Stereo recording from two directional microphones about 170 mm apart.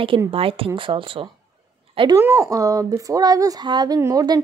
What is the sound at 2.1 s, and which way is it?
A woman's voice, 15° right (ahead or behind).